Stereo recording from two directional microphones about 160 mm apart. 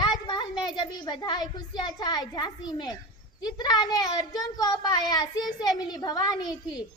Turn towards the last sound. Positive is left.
turn(degrees=25)  # may be behind; listen again after turning